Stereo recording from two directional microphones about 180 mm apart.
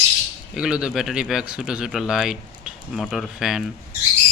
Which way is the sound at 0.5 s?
5° right (ahead or behind).